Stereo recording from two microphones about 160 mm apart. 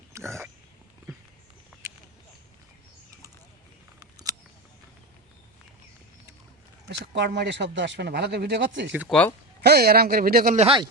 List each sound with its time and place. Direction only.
0.1 s a sound: 15° right (ahead or behind)
4.0 s scissors: 20° right (ahead or behind)
6.8 s speech: 90° right
8.9 s speech: 10° right (ahead or behind)
9.6 s a man's voice: 80° right; by 10.6 s 60° right (ahead or behind)
10.6 s speech: 35° right (ahead or behind)